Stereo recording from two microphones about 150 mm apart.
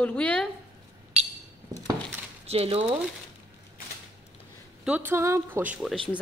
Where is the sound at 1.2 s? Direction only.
5° right (ahead or behind).